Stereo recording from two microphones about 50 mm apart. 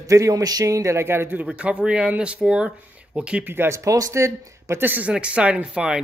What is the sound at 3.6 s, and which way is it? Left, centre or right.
Speech, right.